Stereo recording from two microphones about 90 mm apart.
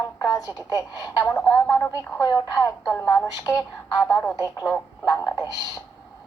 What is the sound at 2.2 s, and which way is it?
A woman's voice, 45° left (ahead or behind).